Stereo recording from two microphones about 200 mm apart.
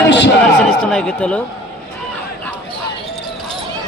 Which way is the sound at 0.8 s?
5° left (ahead or behind).